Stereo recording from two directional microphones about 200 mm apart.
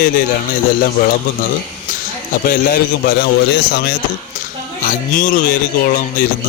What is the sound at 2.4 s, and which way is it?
Speech, 50° left (ahead or behind).